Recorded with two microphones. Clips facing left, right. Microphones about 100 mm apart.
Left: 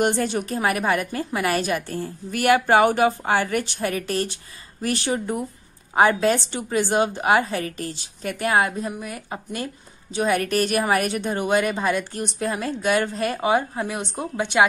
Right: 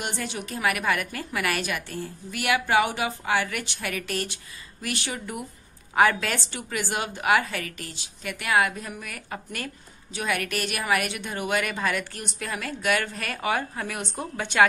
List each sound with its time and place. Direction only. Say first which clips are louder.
0.0 s a woman's voice: left 10 dB; 45° left (ahead or behind); by 14.7 s 20° left (ahead or behind)